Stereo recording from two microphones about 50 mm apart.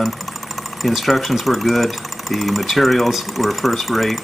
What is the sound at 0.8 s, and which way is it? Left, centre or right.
Speech, centre.